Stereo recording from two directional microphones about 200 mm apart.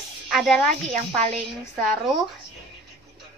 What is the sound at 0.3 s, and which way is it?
Speech, centre (ahead or behind).